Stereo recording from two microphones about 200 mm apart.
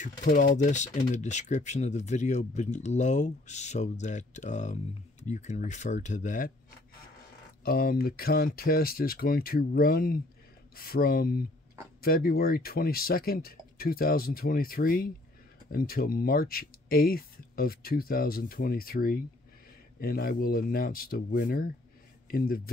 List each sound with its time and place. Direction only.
0.0 s speech: 40° left (ahead or behind)
7.6 s speech: 50° left (ahead or behind)